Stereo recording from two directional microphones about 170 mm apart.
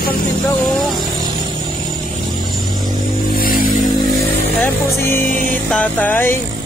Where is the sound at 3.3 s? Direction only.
60° left (ahead or behind).